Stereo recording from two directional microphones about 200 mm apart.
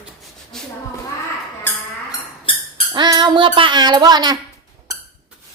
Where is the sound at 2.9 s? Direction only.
20° right (ahead or behind).